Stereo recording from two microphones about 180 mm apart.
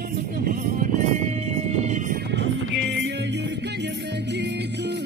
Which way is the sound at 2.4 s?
70° right (ahead or behind).